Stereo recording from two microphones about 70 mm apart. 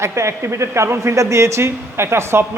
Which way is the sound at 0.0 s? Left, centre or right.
Right.